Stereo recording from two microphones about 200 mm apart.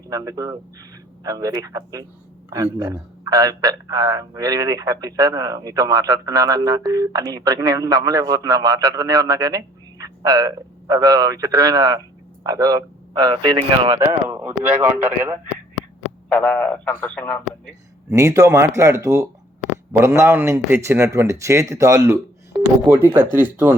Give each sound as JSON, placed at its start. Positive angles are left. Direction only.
{"t": 0.1, "sound": "a man's voice", "side_deg": -20}
{"t": 14.3, "sound": "speech", "side_deg": -10}
{"t": 16.3, "sound": "a man's voice", "side_deg": 10}
{"t": 18.1, "sound": "speech", "side_deg": -15}